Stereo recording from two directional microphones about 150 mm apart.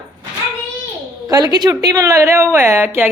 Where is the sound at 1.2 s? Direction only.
25° right (ahead or behind).